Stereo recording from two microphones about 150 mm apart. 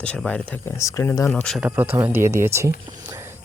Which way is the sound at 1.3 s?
10° left (ahead or behind).